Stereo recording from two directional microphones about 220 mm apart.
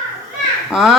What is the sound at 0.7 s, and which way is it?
Speech, centre (ahead or behind).